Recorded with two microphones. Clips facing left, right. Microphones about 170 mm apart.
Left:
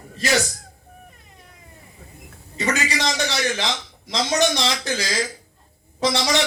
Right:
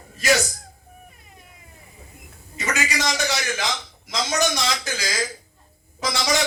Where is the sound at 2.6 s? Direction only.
30° left (ahead or behind).